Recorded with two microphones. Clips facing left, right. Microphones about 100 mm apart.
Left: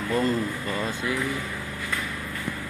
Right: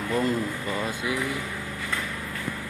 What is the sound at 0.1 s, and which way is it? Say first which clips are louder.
Speech: left 1 dB; 5° right (ahead or behind).